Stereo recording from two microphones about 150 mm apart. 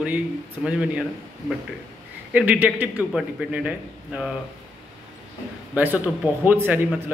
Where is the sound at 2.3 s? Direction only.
10° right (ahead or behind).